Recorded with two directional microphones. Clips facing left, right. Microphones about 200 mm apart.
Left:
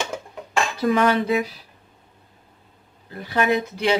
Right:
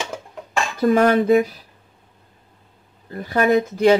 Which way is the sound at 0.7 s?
45° right (ahead or behind).